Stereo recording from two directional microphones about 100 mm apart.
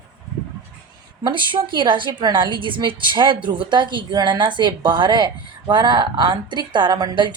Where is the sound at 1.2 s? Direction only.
50° right (ahead or behind).